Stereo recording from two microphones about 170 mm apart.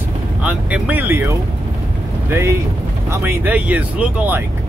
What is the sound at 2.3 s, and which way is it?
Speech, 15° right (ahead or behind).